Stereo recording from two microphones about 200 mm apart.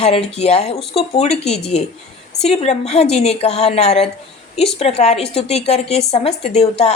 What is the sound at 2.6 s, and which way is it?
A woman's voice, 30° left (ahead or behind).